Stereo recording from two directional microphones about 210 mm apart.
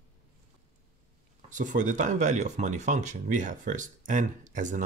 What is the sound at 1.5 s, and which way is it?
Speech, 35° right (ahead or behind).